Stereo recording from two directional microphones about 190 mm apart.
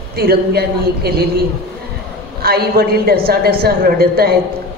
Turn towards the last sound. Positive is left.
turn(degrees=-55)  # may be behind; listen again after turning